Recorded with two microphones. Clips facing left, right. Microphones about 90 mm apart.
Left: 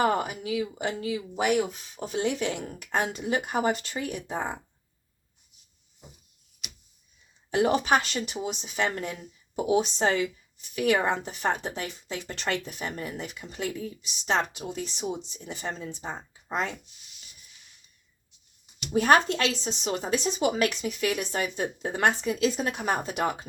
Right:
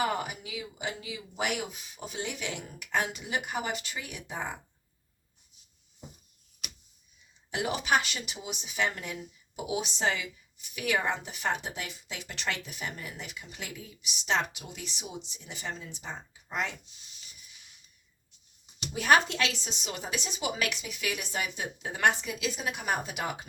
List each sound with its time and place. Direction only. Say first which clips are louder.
0.0 s speech: left 6 dB; 40° left (ahead or behind)
6.6 s a sound: even; 45° right (ahead or behind)
7.5 s speech: left 5 dB; 40° left (ahead or behind)
18.9 s speech: left 3 dB; 35° left (ahead or behind)